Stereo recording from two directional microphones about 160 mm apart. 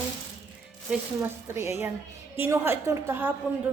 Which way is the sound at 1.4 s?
15° right (ahead or behind).